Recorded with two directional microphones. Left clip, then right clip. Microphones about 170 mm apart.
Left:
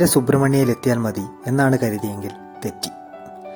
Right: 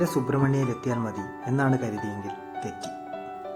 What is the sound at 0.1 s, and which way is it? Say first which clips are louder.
A man's voice: left 8 dB; 35° left (ahead or behind).